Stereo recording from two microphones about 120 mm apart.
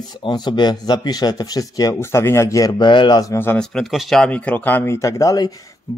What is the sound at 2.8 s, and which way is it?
Speech, 40° left (ahead or behind).